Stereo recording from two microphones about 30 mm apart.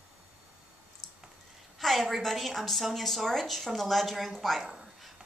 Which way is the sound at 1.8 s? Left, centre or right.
Centre.